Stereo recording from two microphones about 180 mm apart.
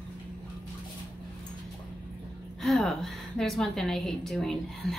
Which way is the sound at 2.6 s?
Centre (ahead or behind).